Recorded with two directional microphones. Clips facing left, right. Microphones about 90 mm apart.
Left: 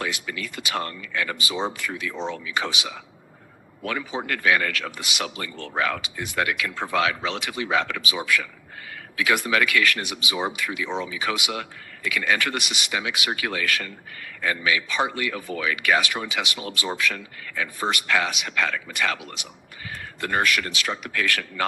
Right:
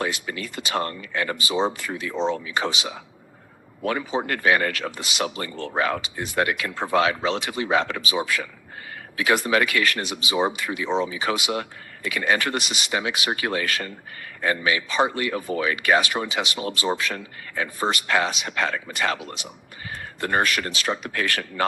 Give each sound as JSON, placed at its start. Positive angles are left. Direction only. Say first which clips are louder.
{"t": 0.0, "sound": "speech", "louder": "right 2 dB", "side_deg": -35}